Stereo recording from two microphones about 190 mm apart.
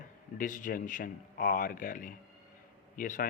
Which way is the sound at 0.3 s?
45° left (ahead or behind).